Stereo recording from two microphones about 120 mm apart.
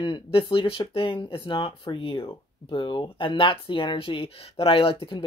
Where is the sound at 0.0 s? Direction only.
45° left (ahead or behind).